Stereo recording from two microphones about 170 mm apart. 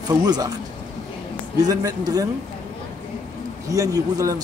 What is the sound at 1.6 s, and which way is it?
Speech, 20° right (ahead or behind).